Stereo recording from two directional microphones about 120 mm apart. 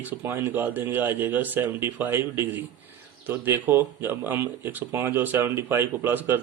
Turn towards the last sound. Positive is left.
turn(degrees=-15)  # may be behind; listen again after turning